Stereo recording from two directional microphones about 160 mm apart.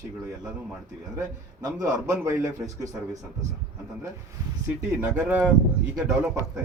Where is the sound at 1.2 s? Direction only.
20° right (ahead or behind).